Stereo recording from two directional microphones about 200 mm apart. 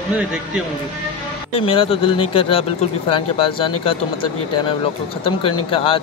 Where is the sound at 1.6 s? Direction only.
30° left (ahead or behind).